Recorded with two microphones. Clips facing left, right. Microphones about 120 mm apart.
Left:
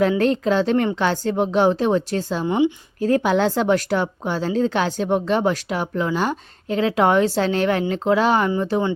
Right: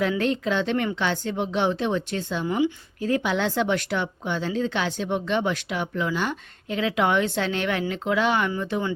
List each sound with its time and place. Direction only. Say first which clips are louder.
0.2 s speech: left 6 dB; 40° left (ahead or behind)